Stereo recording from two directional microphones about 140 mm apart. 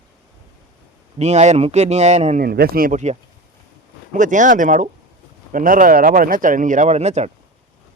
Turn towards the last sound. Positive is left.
turn(degrees=-55)  # may be behind; listen again after turning